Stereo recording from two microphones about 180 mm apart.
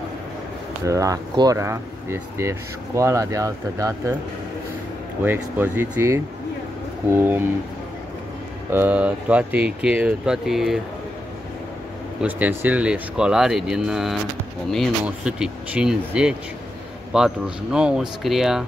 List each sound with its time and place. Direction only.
0.8 s speech: 20° right (ahead or behind)
5.2 s speech: 10° right (ahead or behind)
8.7 s speech: 10° right (ahead or behind)
12.2 s speech: 10° right (ahead or behind)